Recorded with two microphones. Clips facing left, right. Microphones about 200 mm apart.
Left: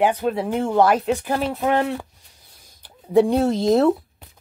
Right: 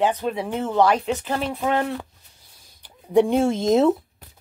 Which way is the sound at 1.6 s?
15° left (ahead or behind).